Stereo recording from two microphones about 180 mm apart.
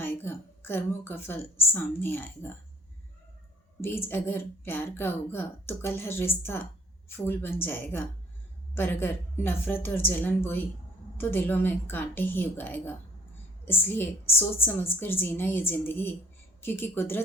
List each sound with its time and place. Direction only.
0.0 s a woman's voice: 10° left (ahead or behind)
3.8 s a woman's voice: 15° left (ahead or behind)